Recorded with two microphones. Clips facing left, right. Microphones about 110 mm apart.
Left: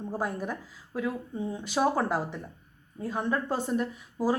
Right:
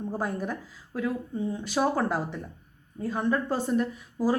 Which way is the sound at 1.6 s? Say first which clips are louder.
Even; 15° left (ahead or behind).